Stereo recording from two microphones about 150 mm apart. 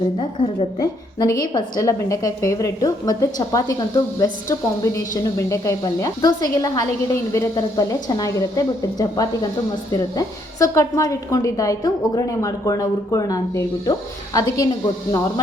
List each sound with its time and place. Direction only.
0.2 s a woman's voice: 30° left (ahead or behind)